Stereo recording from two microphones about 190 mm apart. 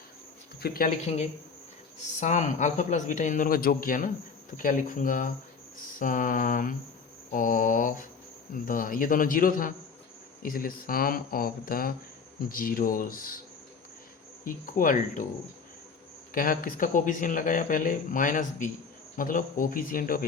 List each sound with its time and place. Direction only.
0.6 s speech: 50° left (ahead or behind)
2.2 s speech: 40° left (ahead or behind)
14.4 s speech: 45° left (ahead or behind)
16.3 s speech: 50° left (ahead or behind)